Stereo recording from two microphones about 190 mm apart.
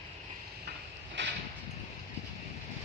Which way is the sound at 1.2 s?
70° right (ahead or behind).